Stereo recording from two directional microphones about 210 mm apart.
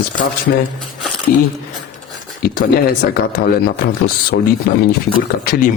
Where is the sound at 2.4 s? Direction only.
45° left (ahead or behind).